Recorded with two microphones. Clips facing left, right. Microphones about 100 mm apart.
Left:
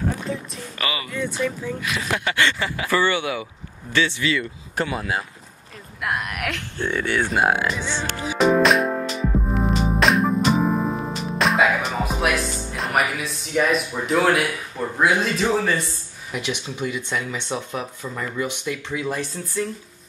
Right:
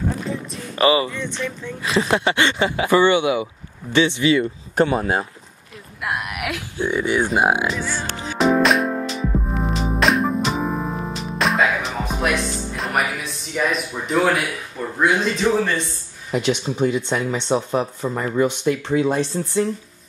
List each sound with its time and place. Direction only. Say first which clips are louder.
0.7 s speech: right 12 dB; 30° right (ahead or behind)
1.1 s speech: left 2 dB; 5° left (ahead or behind)
1.8 s speech: right 11 dB; 30° right (ahead or behind)
6.0 s speech: right 1 dB; 5° right (ahead or behind)
8.1 s music: even; 5° left (ahead or behind)
15.0 s a man's voice: right 1 dB; centre (ahead or behind)
16.3 s speech: right 7 dB; 35° right (ahead or behind)